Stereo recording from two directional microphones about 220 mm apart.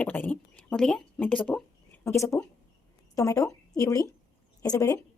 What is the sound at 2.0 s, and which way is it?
A woman's voice, 15° left (ahead or behind).